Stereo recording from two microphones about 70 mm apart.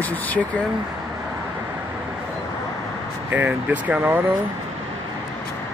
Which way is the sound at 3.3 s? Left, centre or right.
Right.